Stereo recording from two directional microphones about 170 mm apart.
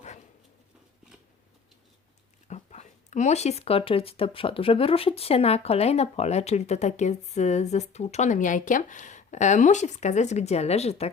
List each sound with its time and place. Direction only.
2.5 s speech: 40° left (ahead or behind)